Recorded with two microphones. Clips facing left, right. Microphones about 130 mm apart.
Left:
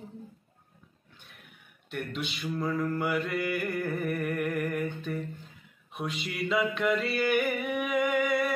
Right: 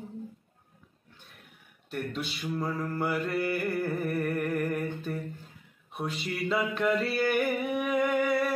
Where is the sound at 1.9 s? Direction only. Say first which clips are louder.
Right 1 dB; 40° right (ahead or behind).